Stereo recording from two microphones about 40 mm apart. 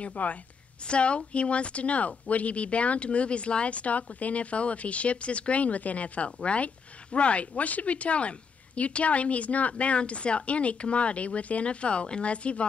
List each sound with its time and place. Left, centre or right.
0.0 s speech: left